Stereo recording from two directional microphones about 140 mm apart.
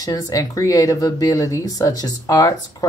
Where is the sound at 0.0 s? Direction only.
25° left (ahead or behind).